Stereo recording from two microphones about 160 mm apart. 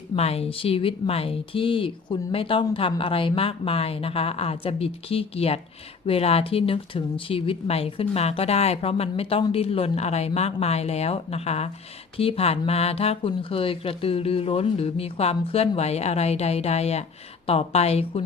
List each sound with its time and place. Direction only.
0.2 s speech: 40° left (ahead or behind)